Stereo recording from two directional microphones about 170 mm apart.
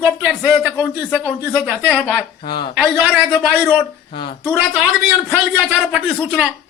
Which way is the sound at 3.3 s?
5° left (ahead or behind).